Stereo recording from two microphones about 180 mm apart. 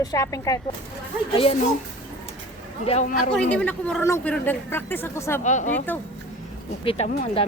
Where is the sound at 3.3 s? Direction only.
5° left (ahead or behind).